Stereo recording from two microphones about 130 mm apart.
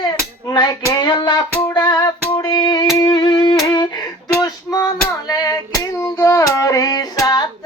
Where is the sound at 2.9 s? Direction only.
30° left (ahead or behind).